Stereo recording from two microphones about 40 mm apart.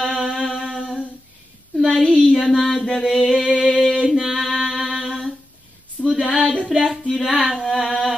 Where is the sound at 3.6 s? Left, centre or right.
Right.